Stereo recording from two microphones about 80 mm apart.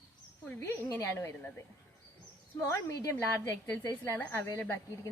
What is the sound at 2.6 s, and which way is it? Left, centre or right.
Speech, left.